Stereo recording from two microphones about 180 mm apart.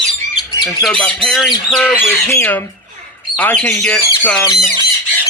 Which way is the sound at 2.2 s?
10° left (ahead or behind).